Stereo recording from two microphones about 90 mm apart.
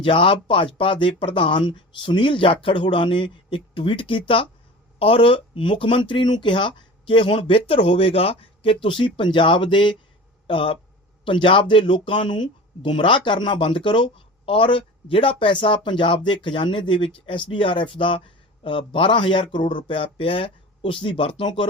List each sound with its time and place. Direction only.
0.0 s speech: 80° left; by 9.9 s 60° left (ahead or behind)
10.4 s speech: 90° left
11.3 s speech: 70° left (ahead or behind)